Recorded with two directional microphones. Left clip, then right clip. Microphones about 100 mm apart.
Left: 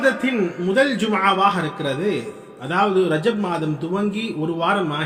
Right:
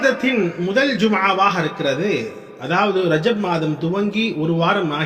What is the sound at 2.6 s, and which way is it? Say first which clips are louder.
A man's voice: right 1 dB; 30° right (ahead or behind).